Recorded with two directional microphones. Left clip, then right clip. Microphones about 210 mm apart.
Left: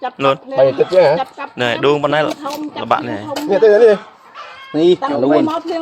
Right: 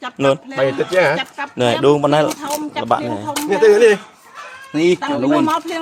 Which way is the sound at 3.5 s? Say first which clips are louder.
Left 1 dB; 45° right (ahead or behind).